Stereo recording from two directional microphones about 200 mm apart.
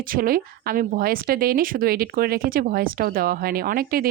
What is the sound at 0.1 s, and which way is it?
Speech, 45° right (ahead or behind).